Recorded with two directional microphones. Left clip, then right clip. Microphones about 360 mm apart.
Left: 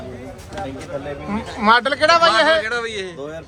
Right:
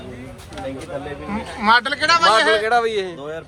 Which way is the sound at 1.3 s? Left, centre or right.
Centre.